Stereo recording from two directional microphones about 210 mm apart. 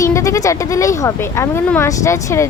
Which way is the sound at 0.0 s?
15° left (ahead or behind).